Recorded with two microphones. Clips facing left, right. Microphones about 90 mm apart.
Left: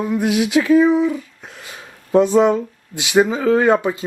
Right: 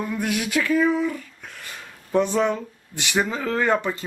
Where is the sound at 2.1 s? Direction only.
40° left (ahead or behind).